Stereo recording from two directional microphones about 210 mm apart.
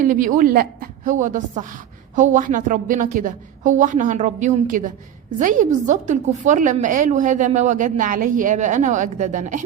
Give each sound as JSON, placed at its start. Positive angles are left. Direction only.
{"t": 0.0, "sound": "a woman's voice", "side_deg": -40}